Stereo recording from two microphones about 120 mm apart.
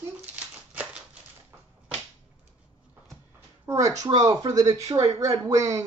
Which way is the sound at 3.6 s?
25° right (ahead or behind).